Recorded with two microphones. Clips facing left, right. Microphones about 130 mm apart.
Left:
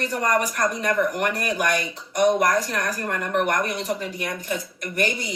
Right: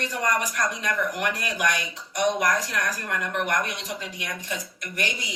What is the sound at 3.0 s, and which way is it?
Speech, 45° left (ahead or behind).